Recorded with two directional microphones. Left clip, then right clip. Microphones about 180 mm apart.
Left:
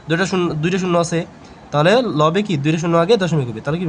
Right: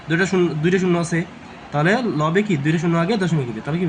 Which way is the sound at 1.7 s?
60° left (ahead or behind).